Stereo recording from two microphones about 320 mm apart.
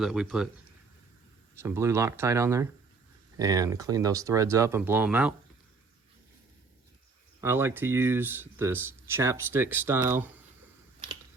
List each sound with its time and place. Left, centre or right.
0.0 s speech: centre
1.5 s speech: centre
7.4 s speech: centre